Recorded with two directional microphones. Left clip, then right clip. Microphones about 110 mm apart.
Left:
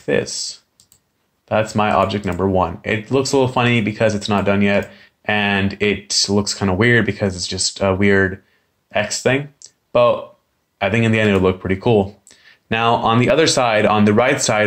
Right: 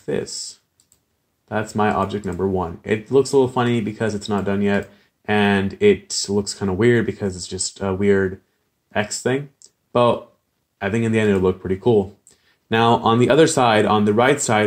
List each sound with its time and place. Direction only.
0.0 s speech: 35° right (ahead or behind)